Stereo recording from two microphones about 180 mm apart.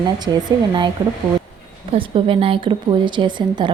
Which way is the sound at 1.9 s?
30° right (ahead or behind).